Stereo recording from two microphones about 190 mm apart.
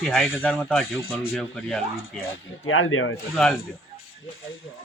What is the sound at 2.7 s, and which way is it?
Speech, 90° left.